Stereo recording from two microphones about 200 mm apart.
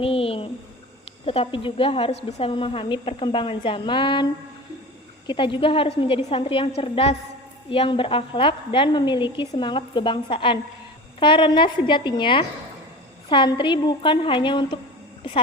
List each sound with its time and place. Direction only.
0.0 s a sound: 30° left (ahead or behind)
1.2 s a woman's voice: 30° left (ahead or behind)
5.3 s a woman's voice: 25° left (ahead or behind)